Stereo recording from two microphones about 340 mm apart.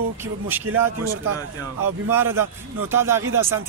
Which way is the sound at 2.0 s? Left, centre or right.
Centre.